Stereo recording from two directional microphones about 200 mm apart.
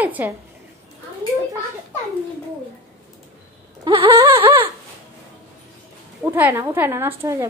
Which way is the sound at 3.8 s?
25° right (ahead or behind).